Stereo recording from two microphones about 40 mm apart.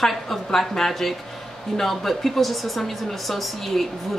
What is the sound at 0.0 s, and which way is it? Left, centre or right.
A woman's voice, centre.